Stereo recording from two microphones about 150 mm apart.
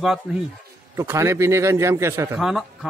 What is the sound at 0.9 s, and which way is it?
A man's voice, 20° right (ahead or behind).